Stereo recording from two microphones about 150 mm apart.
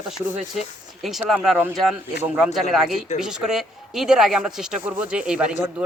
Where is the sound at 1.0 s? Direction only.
Centre (ahead or behind).